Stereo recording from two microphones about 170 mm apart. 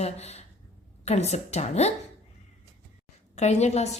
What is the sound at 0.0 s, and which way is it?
A woman's voice, 40° left (ahead or behind).